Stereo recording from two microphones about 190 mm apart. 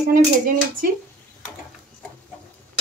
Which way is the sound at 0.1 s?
50° right (ahead or behind).